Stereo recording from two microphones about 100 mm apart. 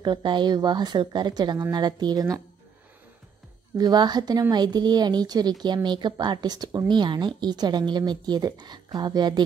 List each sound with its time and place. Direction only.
0.0 s a woman's voice: 50° right (ahead or behind); by 2.4 s 35° right (ahead or behind)
3.7 s a woman's voice: 40° right (ahead or behind)